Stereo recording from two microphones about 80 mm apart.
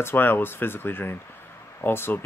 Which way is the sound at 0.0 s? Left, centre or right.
Left.